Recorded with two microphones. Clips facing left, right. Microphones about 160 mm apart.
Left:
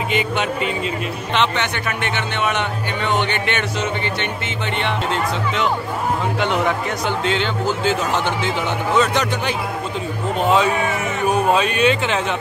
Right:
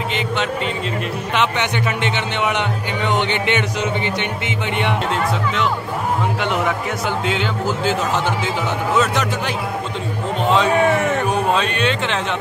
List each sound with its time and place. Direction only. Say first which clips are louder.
1.3 s a man's voice: even; 10° right (ahead or behind)
6.4 s speech: left 1 dB; centre (ahead or behind)
11.5 s speech: left 3 dB; 5° left (ahead or behind)